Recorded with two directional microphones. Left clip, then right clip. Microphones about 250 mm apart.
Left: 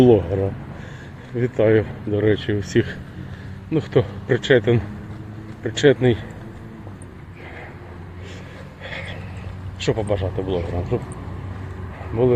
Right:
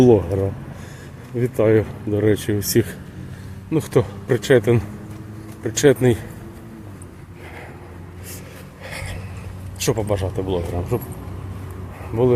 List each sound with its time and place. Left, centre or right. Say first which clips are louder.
0.0 s speech: even; centre
1.4 s speech: even; centre
8.8 s a sound: left 1 dB; centre
9.7 s speech: right 1 dB; centre